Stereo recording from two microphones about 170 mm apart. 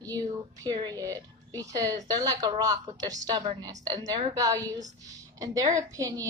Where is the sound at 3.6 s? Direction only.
20° right (ahead or behind).